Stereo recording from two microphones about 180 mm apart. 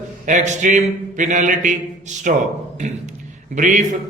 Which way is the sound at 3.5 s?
45° right (ahead or behind).